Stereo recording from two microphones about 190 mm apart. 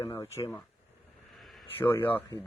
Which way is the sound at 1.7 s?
10° left (ahead or behind).